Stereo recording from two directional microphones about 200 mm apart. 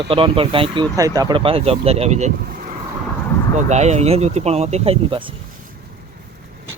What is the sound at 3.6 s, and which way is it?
Speech, 35° right (ahead or behind).